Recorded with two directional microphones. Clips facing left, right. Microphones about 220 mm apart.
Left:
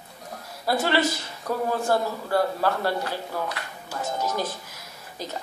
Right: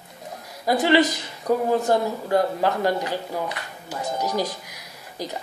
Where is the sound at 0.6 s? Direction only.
15° right (ahead or behind).